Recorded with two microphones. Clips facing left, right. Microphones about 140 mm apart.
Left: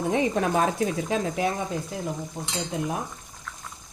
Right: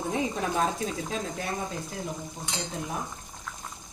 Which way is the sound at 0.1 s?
80° left.